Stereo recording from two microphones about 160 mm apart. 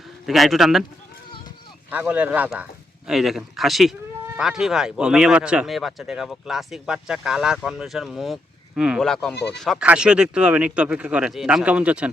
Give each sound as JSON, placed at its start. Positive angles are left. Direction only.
{"t": 0.3, "sound": "speech", "side_deg": 0}
{"t": 1.9, "sound": "speech", "side_deg": -10}
{"t": 9.3, "sound": "speech", "side_deg": 90}
{"t": 9.6, "sound": "speech", "side_deg": -5}